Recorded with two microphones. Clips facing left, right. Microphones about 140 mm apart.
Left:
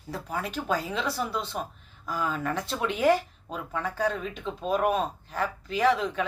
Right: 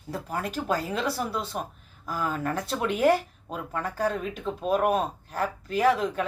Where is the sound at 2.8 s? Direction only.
5° right (ahead or behind).